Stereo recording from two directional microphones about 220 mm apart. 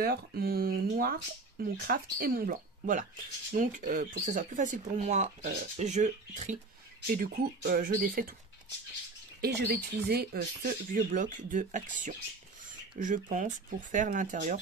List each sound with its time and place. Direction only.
0.0 s speech: 45° right (ahead or behind)
9.4 s speech: 45° right (ahead or behind)